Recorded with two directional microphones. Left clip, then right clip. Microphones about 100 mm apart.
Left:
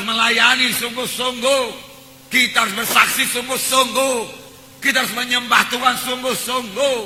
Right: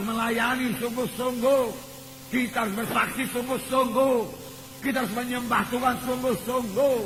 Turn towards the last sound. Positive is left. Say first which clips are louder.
# left 4 dB
turn(degrees=-25)  # may be behind; listen again after turning